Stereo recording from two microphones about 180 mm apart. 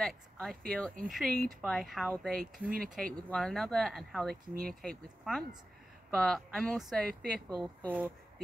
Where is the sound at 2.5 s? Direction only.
50° right (ahead or behind).